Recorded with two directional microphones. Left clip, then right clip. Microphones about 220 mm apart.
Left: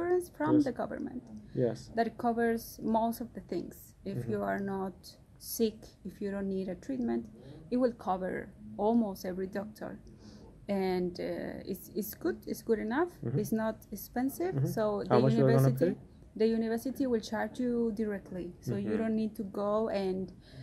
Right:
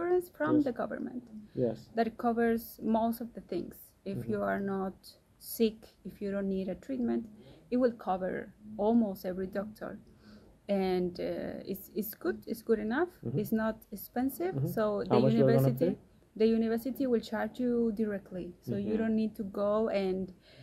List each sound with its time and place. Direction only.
0.7 s speech: centre (ahead or behind)
14.5 s speech: 15° left (ahead or behind)
14.8 s speech: 5° right (ahead or behind)
15.0 s speech: 15° left (ahead or behind)
16.3 s speech: 5° right (ahead or behind)